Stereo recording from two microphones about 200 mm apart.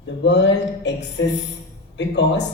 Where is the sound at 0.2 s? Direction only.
60° left (ahead or behind).